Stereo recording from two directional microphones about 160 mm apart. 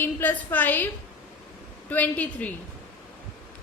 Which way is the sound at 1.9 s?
10° left (ahead or behind).